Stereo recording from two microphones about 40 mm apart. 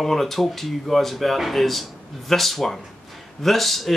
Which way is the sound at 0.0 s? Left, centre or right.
Centre.